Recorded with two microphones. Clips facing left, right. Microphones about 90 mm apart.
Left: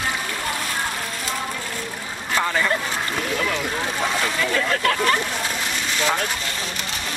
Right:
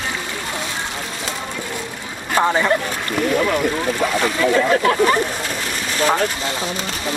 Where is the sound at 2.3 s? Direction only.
25° right (ahead or behind).